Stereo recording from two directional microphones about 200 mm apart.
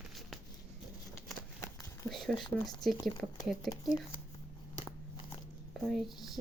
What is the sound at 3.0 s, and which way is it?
Speech, 20° left (ahead or behind).